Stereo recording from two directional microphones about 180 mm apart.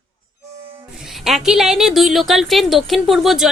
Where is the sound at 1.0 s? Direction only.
Centre (ahead or behind).